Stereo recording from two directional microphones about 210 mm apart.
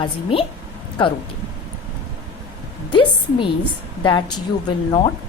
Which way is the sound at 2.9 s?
25° left (ahead or behind).